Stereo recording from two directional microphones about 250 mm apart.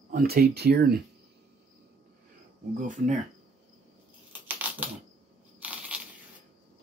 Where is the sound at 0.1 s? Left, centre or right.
Right.